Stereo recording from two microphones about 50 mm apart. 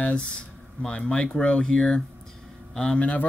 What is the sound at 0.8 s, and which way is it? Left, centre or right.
A man's voice, centre.